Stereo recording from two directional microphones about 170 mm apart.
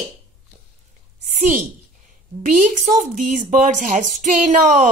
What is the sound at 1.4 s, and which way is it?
Speech, 45° right (ahead or behind).